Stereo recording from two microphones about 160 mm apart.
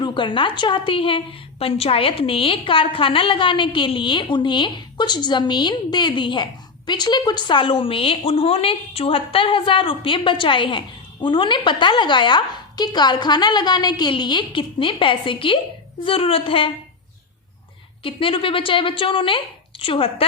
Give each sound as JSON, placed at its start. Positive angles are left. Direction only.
{"t": 0.0, "sound": "a woman's voice", "side_deg": 30}
{"t": 18.0, "sound": "a woman's voice", "side_deg": 35}